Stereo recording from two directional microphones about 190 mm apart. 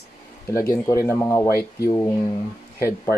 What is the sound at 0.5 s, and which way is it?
Speech, 15° left (ahead or behind).